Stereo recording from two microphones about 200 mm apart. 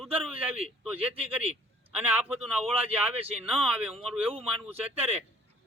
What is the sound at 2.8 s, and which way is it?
Speech, 30° right (ahead or behind).